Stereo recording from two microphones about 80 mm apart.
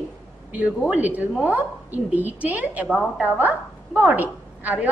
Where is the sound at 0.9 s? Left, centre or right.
Right.